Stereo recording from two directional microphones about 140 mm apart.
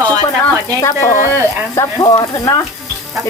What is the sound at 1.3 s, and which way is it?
Speech, 25° left (ahead or behind).